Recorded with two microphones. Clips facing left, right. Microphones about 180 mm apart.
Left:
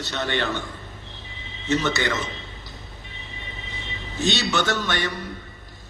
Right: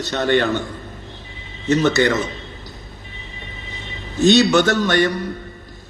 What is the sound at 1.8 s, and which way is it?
Speech, 45° right (ahead or behind).